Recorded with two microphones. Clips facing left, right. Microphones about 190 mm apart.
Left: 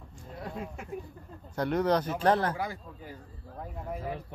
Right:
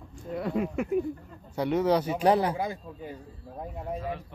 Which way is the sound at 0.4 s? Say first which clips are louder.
Right 10 dB; 85° right.